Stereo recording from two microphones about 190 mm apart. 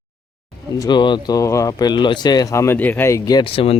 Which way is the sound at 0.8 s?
25° left (ahead or behind).